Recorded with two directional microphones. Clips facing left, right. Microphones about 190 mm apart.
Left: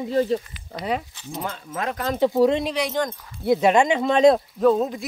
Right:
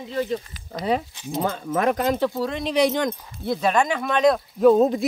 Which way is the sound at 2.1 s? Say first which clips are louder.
Left 6 dB; 20° left (ahead or behind).